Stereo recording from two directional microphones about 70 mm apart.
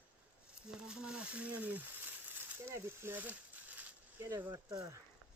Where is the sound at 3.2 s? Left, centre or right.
Right.